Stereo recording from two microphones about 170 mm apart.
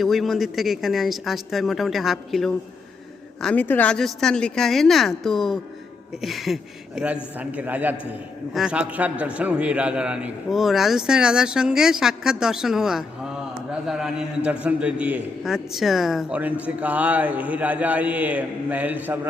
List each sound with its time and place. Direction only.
0.0 s a man's voice: centre (ahead or behind)